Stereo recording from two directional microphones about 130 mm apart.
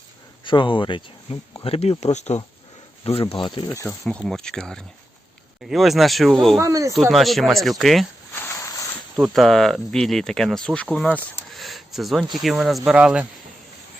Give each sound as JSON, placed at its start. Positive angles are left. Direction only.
{"t": 0.4, "sound": "speech", "side_deg": 40}
{"t": 3.9, "sound": "speech", "side_deg": 10}
{"t": 6.6, "sound": "speech", "side_deg": -25}
{"t": 7.1, "sound": "speech", "side_deg": 0}
{"t": 8.4, "sound": "a sound", "side_deg": 20}
{"t": 9.2, "sound": "speech", "side_deg": 0}